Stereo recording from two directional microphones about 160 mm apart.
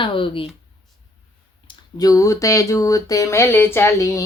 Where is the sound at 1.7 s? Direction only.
25° left (ahead or behind).